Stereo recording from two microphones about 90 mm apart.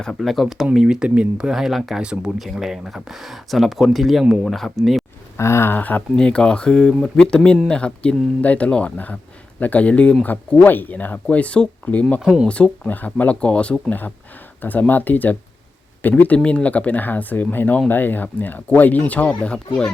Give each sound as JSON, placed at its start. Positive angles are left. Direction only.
{"t": 0.0, "sound": "speech", "side_deg": 5}
{"t": 5.4, "sound": "speech", "side_deg": 30}
{"t": 12.2, "sound": "speech", "side_deg": -10}
{"t": 12.5, "sound": "speech", "side_deg": 10}